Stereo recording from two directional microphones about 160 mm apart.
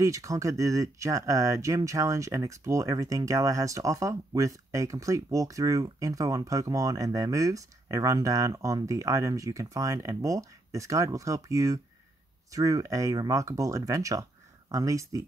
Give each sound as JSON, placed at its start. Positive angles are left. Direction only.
{"t": 0.0, "sound": "speech", "side_deg": -20}